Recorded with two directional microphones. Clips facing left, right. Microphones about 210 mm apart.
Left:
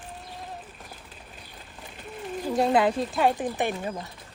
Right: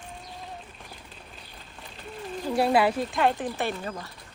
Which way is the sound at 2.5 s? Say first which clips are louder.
Even; 20° left (ahead or behind).